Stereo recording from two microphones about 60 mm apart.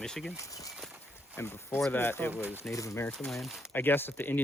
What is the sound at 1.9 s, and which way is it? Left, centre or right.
Speech, left.